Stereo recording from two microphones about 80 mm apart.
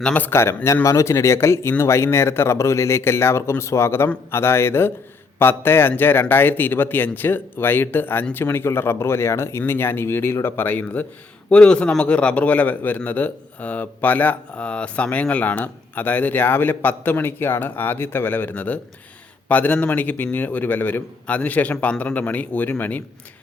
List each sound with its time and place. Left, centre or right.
0.0 s a man's voice: centre
0.3 s speech: left
11.4 s a man's voice: centre